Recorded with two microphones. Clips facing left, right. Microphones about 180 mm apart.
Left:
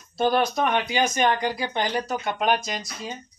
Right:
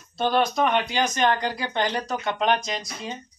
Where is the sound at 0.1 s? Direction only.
10° left (ahead or behind).